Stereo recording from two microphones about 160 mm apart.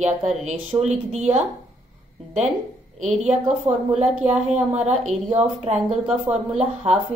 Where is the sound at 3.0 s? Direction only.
45° right (ahead or behind).